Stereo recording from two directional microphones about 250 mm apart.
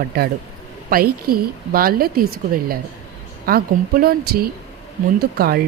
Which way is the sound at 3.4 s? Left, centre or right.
Right.